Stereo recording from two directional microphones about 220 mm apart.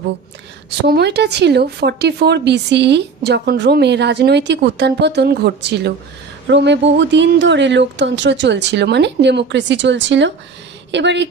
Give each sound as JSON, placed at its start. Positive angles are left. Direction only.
{"t": 0.7, "sound": "speech", "side_deg": -50}